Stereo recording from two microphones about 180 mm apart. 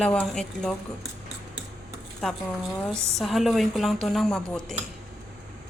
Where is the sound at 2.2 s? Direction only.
Centre (ahead or behind).